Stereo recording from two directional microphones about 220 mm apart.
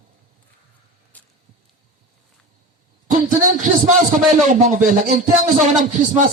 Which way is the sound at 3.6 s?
35° right (ahead or behind).